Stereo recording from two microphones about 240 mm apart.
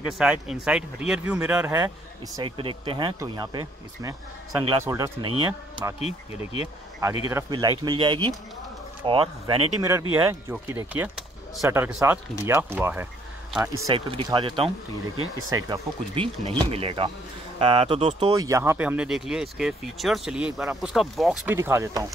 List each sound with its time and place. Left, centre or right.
0.2 s speech: centre
2.3 s speech: right
5.9 s speech: left
7.2 s speech: centre
10.1 s speech: centre
13.8 s speech: right; by 21.5 s centre
21.5 s speech: centre